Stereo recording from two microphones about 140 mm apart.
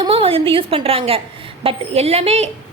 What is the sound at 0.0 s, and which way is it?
A woman's voice, 40° right (ahead or behind).